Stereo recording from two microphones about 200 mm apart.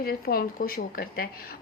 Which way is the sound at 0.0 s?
50° left (ahead or behind).